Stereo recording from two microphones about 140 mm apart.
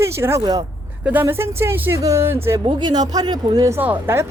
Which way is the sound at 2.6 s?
30° right (ahead or behind).